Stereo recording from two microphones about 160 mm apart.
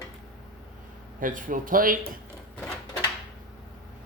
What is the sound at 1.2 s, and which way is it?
Speech, 55° right (ahead or behind).